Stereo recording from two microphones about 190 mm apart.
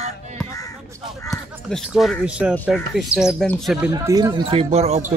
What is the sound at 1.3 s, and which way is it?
Speech, centre (ahead or behind).